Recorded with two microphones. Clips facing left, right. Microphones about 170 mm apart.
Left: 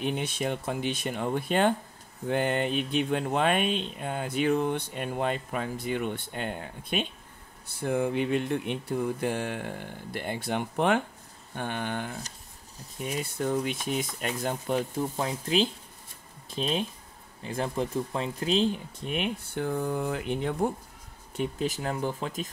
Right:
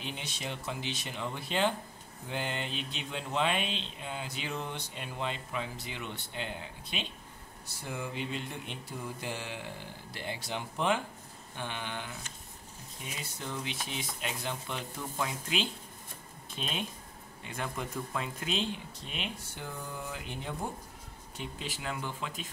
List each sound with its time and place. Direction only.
0.0 s speech: 55° left (ahead or behind); by 18.8 s 35° left (ahead or behind)
18.9 s speech: 55° left (ahead or behind)
21.4 s speech: 45° left (ahead or behind)